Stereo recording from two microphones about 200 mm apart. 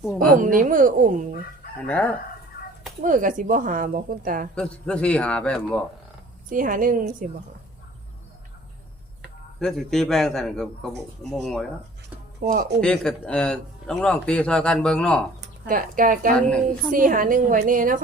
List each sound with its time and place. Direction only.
0.0 s a man's voice: 5° left (ahead or behind)
0.3 s speech: 40° right (ahead or behind)
1.9 s chicken: 5° left (ahead or behind)
3.0 s speech: 40° right (ahead or behind)
4.5 s a man's voice: 5° left (ahead or behind)
6.5 s a woman's voice: 40° right (ahead or behind)
9.6 s a man's voice: centre (ahead or behind)
12.4 s a woman's voice: 45° right (ahead or behind)
12.8 s a man's voice: 5° left (ahead or behind)
15.6 s a woman's voice: 40° right (ahead or behind)